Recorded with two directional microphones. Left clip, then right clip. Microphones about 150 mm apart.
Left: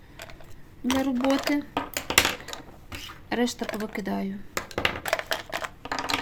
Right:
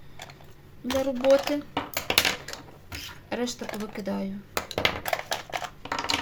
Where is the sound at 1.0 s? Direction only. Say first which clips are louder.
Right 5 dB; 60° left (ahead or behind).